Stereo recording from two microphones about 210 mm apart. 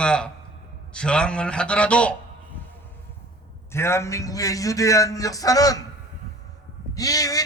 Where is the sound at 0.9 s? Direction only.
5° left (ahead or behind).